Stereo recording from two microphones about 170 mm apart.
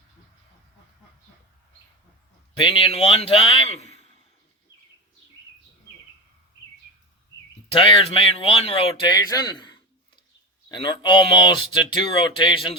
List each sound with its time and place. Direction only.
2.6 s speech: 30° left (ahead or behind)
7.7 s speech: 35° left (ahead or behind)